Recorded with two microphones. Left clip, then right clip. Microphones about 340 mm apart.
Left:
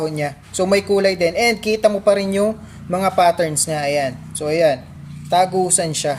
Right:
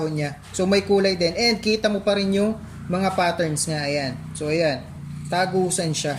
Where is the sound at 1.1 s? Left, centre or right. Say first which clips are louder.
Left 4 dB; left.